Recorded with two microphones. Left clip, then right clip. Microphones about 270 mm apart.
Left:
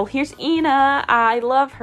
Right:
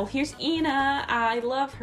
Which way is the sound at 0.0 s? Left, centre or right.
Centre.